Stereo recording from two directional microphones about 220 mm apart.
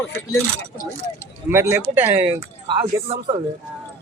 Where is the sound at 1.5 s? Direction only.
10° right (ahead or behind).